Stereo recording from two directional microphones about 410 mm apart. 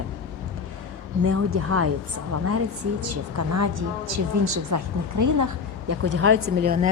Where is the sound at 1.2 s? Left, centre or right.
Right.